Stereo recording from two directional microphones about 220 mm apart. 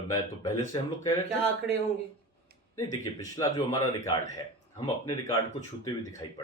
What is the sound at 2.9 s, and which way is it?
Speech, 15° left (ahead or behind).